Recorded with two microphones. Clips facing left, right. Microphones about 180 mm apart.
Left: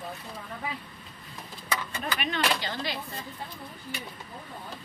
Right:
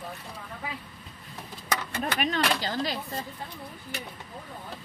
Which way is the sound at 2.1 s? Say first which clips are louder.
Right 1 dB; 40° right (ahead or behind).